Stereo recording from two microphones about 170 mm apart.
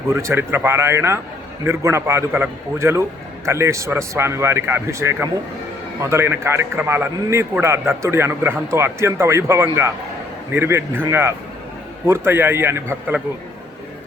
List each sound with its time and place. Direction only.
0.1 s a man's voice: 15° right (ahead or behind)